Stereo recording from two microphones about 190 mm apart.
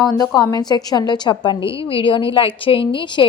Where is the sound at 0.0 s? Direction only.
20° left (ahead or behind).